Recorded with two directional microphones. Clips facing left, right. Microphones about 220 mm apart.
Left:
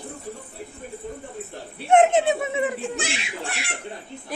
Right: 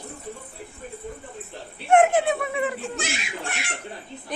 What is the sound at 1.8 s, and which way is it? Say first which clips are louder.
A woman's voice: left 1 dB; 20° left (ahead or behind).